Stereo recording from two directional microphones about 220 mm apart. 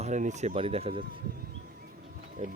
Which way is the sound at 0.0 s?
35° right (ahead or behind).